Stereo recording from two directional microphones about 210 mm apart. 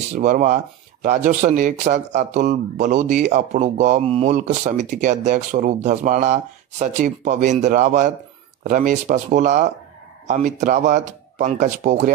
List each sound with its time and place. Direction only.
0.1 s a man's voice: 40° right (ahead or behind)